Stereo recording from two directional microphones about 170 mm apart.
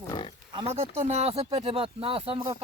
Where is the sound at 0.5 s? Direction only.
35° right (ahead or behind).